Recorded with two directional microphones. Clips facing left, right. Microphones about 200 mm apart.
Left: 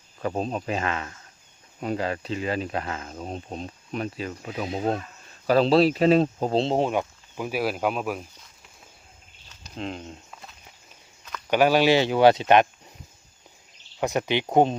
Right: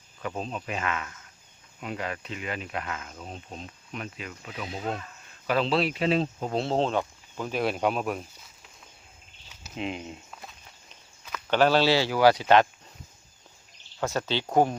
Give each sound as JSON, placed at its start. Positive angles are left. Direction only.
{"t": 0.2, "sound": "speech", "side_deg": 40}
{"t": 6.5, "sound": "speech", "side_deg": 25}
{"t": 6.7, "sound": "speech", "side_deg": 15}
{"t": 9.5, "sound": "walk", "side_deg": -5}
{"t": 11.4, "sound": "speech", "side_deg": 10}
{"t": 14.0, "sound": "speech", "side_deg": 15}